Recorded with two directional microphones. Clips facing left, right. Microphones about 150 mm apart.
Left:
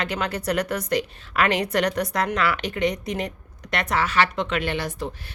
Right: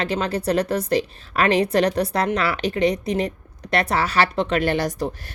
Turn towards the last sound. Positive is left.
turn(degrees=-40)  # may be behind; listen again after turning